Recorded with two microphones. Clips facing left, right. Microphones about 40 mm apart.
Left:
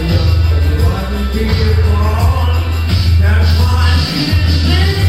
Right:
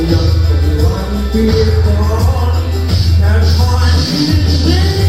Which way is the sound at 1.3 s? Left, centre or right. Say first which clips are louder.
Right 7 dB; left.